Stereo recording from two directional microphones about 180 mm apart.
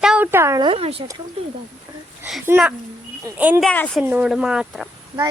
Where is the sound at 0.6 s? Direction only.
30° right (ahead or behind).